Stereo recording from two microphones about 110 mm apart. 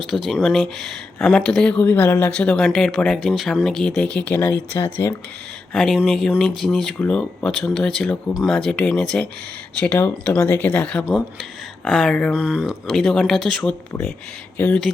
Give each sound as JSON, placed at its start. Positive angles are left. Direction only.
{"t": 0.0, "sound": "speech", "side_deg": 0}
{"t": 5.7, "sound": "speech", "side_deg": 5}
{"t": 11.0, "sound": "speech", "side_deg": -5}
{"t": 12.3, "sound": "speech", "side_deg": -10}
{"t": 14.6, "sound": "speech", "side_deg": 20}